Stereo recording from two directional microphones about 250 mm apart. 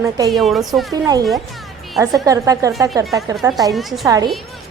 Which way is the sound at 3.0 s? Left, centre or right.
Centre.